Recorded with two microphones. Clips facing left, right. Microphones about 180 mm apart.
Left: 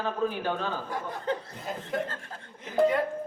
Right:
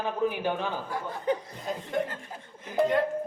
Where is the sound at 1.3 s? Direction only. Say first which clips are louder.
Right 4 dB; 15° right (ahead or behind).